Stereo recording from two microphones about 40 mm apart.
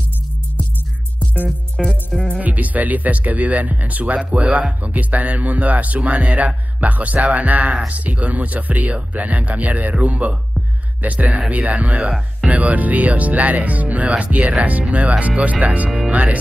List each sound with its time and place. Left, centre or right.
1.8 s music: centre
2.4 s speech: right